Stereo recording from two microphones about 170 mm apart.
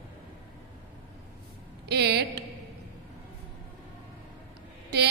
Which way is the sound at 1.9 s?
75° right (ahead or behind).